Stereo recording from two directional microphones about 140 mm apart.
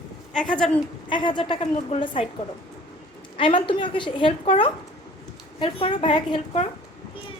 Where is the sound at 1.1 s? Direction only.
35° left (ahead or behind).